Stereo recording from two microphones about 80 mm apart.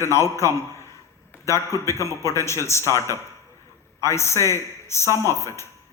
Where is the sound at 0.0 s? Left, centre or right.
Left.